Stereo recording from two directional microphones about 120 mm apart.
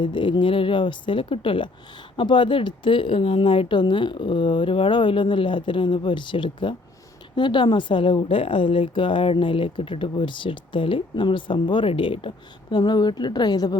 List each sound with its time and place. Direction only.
0.0 s a woman's voice: 40° left (ahead or behind)
12.7 s speech: 35° left (ahead or behind)